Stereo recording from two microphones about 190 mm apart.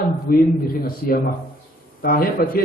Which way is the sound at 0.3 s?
50° left (ahead or behind).